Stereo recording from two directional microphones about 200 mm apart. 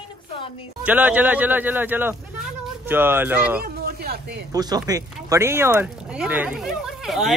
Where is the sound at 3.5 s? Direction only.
50° right (ahead or behind).